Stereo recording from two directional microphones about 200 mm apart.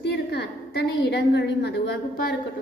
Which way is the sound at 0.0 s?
55° left (ahead or behind).